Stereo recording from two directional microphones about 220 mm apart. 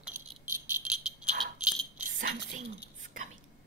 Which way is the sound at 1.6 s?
5° right (ahead or behind).